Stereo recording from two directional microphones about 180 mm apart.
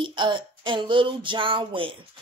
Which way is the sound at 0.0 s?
25° right (ahead or behind).